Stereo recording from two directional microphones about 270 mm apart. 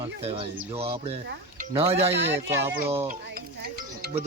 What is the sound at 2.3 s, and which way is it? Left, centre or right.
Speech, centre.